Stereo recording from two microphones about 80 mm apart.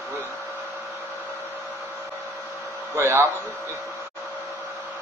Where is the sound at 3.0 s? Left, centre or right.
Right.